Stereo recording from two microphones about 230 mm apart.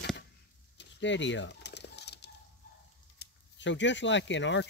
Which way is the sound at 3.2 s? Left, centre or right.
Left.